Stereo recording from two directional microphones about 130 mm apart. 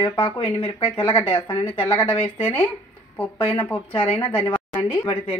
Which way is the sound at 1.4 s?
15° left (ahead or behind).